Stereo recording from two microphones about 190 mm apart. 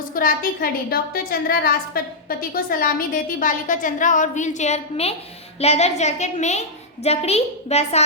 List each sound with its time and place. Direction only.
0.1 s a woman's voice: 50° left (ahead or behind)